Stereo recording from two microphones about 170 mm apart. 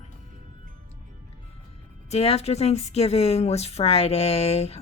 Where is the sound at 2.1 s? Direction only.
35° left (ahead or behind).